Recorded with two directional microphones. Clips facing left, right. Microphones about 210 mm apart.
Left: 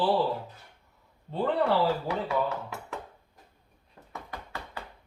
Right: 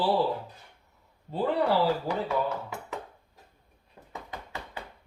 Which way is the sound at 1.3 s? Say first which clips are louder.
Even; 5° right (ahead or behind).